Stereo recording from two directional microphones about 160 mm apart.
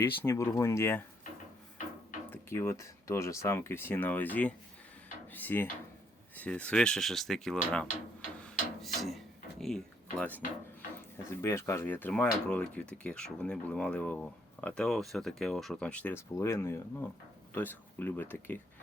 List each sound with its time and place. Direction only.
0.0 s speech: 15° left (ahead or behind)
2.3 s speech: 15° left (ahead or behind)
8.4 s a sound: centre (ahead or behind)
11.3 s speech: 15° left (ahead or behind)